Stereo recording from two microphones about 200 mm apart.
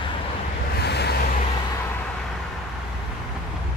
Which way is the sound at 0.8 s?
55° left (ahead or behind).